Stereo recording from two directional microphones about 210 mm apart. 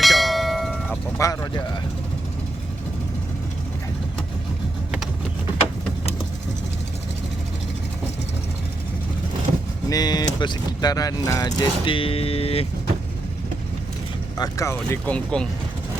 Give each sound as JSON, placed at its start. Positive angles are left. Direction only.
{"t": 0.0, "sound": "bell", "side_deg": 0}
{"t": 1.2, "sound": "speech", "side_deg": 15}
{"t": 9.9, "sound": "speech", "side_deg": 20}
{"t": 14.3, "sound": "speech", "side_deg": 15}